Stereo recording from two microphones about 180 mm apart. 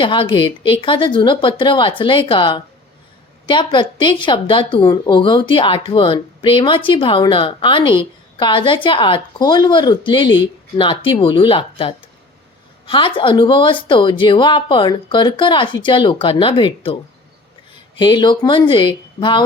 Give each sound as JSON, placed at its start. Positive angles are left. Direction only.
{"t": 0.0, "sound": "speech", "side_deg": 30}
{"t": 18.0, "sound": "speech", "side_deg": 25}